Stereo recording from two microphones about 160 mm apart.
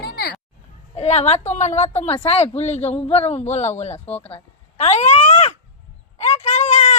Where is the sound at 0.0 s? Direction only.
75° left (ahead or behind).